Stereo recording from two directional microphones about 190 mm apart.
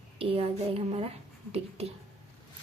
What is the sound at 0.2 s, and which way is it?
Speech, 30° right (ahead or behind).